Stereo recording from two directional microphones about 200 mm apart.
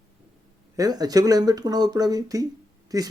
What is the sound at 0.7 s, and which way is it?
A man's voice, 20° right (ahead or behind).